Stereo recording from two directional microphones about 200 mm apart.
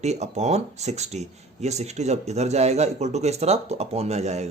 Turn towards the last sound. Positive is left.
turn(degrees=-35)  # may be behind; listen again after turning